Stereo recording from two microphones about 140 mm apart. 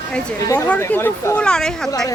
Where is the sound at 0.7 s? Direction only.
15° left (ahead or behind).